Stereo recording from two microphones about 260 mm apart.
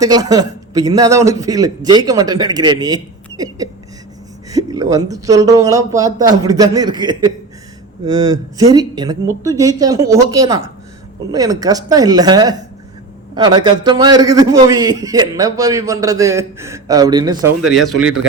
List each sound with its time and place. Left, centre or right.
0.0 s a man's voice: centre
17.9 s a man's voice: right